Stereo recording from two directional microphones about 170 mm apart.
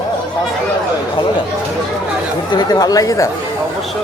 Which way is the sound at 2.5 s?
20° left (ahead or behind).